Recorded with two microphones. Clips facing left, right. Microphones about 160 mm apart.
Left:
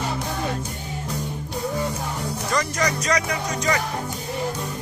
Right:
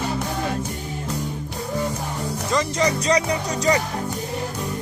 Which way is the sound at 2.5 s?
25° right (ahead or behind).